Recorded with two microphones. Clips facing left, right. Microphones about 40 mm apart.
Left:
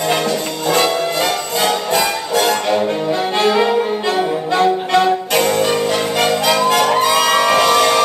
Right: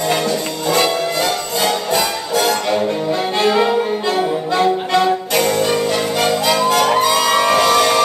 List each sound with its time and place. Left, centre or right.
1.9 s music: left
4.9 s music: left